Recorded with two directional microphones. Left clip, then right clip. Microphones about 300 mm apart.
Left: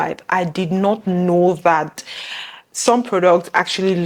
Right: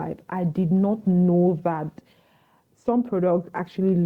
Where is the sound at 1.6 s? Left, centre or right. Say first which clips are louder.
Left 12 dB; centre.